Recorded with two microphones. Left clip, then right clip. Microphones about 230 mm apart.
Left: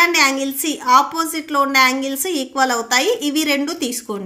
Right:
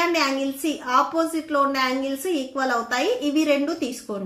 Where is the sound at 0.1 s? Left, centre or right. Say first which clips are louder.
Left 6 dB; left.